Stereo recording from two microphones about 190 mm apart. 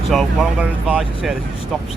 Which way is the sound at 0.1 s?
5° right (ahead or behind).